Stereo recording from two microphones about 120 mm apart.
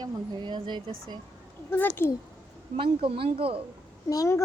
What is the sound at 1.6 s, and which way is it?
Speech, 20° left (ahead or behind).